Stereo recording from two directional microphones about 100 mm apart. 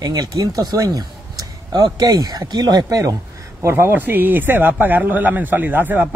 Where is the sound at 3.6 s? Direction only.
25° right (ahead or behind).